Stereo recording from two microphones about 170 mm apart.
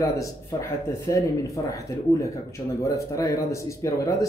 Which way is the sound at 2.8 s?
20° left (ahead or behind).